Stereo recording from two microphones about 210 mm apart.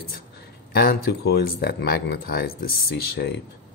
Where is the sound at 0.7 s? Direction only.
50° left (ahead or behind).